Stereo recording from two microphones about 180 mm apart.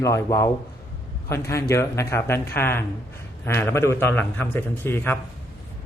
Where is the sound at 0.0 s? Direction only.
15° left (ahead or behind).